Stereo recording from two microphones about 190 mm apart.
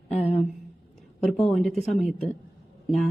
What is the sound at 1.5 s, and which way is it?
Speech, centre (ahead or behind).